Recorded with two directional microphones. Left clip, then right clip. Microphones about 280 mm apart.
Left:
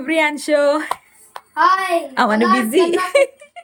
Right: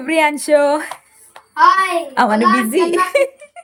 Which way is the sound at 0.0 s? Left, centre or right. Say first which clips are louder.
Right 2 dB; centre.